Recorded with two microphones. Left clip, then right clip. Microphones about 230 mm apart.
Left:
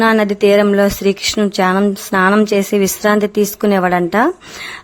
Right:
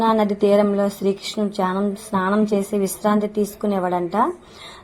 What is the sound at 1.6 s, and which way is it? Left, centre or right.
Speech, left.